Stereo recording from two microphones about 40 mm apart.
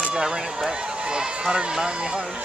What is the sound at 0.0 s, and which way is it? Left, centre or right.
Speech, centre.